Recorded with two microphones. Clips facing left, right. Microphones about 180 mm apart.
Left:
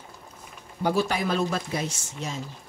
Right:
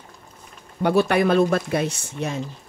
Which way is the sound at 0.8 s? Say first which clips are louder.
Right 7 dB; 65° right (ahead or behind).